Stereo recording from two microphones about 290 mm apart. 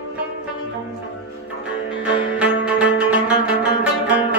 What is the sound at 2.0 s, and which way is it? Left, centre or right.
Music, centre.